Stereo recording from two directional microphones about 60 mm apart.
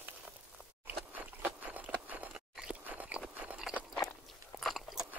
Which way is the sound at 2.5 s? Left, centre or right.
Right.